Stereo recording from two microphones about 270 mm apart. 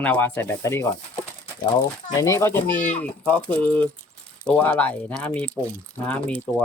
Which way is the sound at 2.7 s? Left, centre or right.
Left.